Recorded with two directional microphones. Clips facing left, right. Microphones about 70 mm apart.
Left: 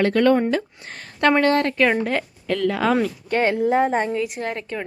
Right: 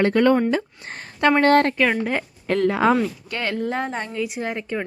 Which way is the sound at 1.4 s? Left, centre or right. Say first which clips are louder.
Right 2 dB; right.